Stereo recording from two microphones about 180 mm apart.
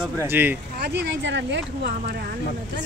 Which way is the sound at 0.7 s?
65° right (ahead or behind).